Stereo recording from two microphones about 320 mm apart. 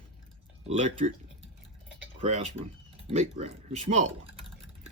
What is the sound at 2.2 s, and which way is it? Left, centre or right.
Speech, right.